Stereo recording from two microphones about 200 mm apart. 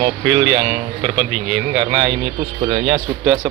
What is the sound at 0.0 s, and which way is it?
Speech, 10° right (ahead or behind).